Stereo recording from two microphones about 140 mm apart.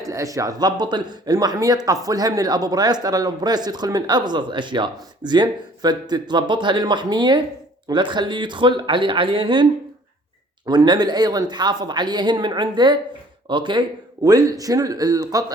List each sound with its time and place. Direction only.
0.0 s speech: 25° right (ahead or behind)
10.7 s speech: 30° right (ahead or behind)